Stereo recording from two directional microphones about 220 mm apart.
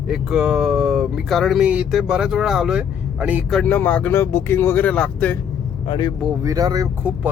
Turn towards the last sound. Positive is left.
turn(degrees=-10)  # may be behind; listen again after turning